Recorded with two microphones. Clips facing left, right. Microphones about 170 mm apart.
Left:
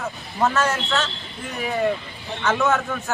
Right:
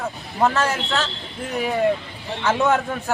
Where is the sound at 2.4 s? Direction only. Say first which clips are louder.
Right 2 dB; 30° right (ahead or behind).